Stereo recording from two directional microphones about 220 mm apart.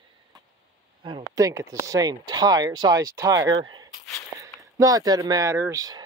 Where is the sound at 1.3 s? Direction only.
15° right (ahead or behind).